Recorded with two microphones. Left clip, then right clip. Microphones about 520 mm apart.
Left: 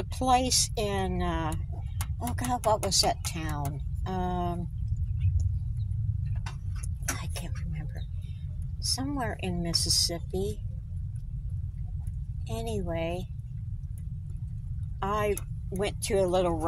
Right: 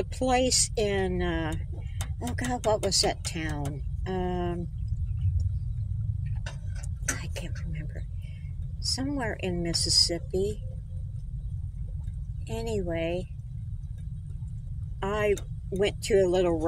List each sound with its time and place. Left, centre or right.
0.2 s speech: left
7.2 s a sound: left
8.8 s speech: left
12.4 s speech: left
15.0 s speech: left